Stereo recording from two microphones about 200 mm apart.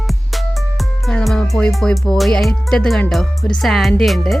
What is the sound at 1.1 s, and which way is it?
Speech, 5° left (ahead or behind).